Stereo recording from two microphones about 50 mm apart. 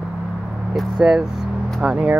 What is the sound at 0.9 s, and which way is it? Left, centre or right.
Speech, centre.